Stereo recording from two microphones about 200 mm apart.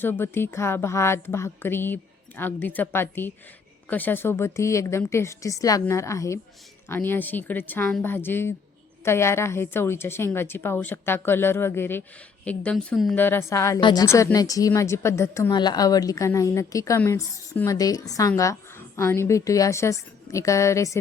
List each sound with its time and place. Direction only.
0.0 s a woman's voice: 10° left (ahead or behind)